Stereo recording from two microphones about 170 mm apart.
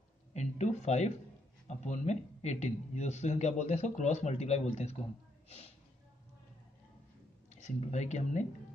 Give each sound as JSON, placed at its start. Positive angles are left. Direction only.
{"t": 0.3, "sound": "speech", "side_deg": 40}
{"t": 7.4, "sound": "speech", "side_deg": 45}